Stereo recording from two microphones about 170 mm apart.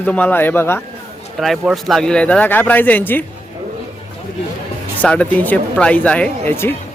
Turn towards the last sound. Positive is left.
turn(degrees=10)  # may be behind; listen again after turning